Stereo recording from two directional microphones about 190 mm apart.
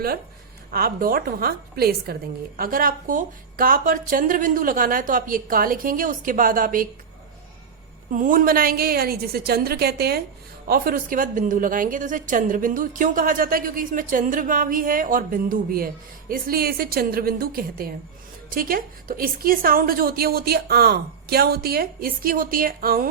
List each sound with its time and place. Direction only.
0.7 s a woman's voice: 50° right (ahead or behind)
8.1 s a woman's voice: 45° right (ahead or behind)